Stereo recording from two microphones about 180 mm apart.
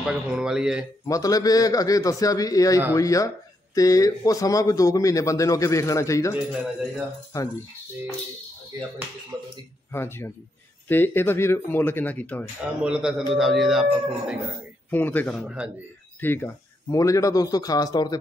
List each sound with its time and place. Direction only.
0.0 s speech: 5° right (ahead or behind)
1.0 s a man's voice: 20° left (ahead or behind)
6.3 s speech: 5° right (ahead or behind)
7.3 s a man's voice: 20° left (ahead or behind)
8.7 s speech: 20° right (ahead or behind)
9.9 s a man's voice: 15° left (ahead or behind)
12.8 s speech: 5° right (ahead or behind)
14.9 s a man's voice: 10° left (ahead or behind)